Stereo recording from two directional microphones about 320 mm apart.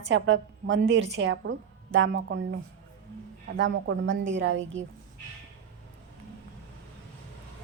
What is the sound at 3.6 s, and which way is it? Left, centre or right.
Speech, right.